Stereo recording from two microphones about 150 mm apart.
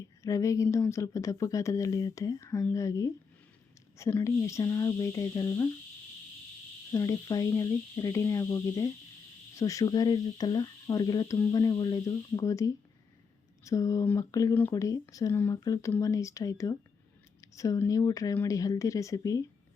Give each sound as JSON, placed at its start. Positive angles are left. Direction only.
{"t": 0.2, "sound": "speech", "side_deg": 20}
{"t": 6.9, "sound": "speech", "side_deg": 25}